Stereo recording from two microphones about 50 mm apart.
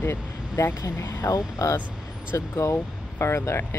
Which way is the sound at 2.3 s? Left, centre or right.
Left.